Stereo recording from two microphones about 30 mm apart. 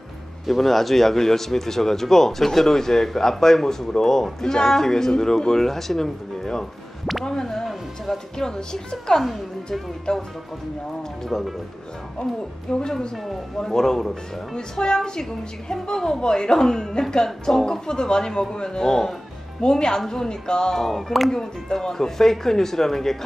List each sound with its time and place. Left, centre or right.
0.5 s a woman's voice: centre; by 10.2 s left
12.7 s a woman's voice: left
13.6 s a woman's voice: centre
16.5 s speech: centre
17.6 s a woman's voice: left
20.7 s speech: centre
21.3 s speech: centre